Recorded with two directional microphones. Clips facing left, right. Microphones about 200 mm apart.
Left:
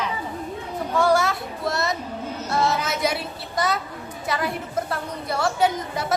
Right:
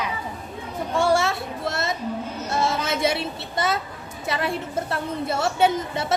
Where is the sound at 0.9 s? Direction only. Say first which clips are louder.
Left 1 dB; 25° right (ahead or behind).